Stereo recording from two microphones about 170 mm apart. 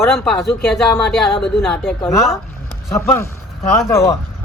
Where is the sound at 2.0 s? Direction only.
15° left (ahead or behind).